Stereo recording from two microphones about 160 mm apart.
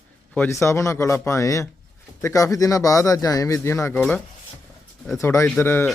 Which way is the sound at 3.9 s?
5° left (ahead or behind).